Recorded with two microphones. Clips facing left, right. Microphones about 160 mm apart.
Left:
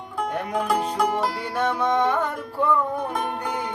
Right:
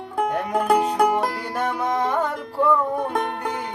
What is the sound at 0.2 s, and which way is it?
Music, 50° right (ahead or behind).